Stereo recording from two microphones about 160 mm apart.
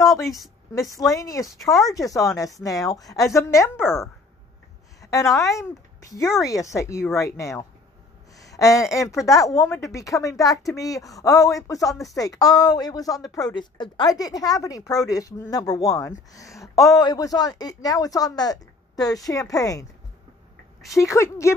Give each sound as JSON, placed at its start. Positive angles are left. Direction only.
{"t": 0.4, "sound": "speech", "side_deg": 0}
{"t": 0.9, "sound": "a woman's voice", "side_deg": 20}
{"t": 1.6, "sound": "speech", "side_deg": 0}
{"t": 1.9, "sound": "a woman's voice", "side_deg": 20}
{"t": 21.0, "sound": "a woman's voice", "side_deg": 20}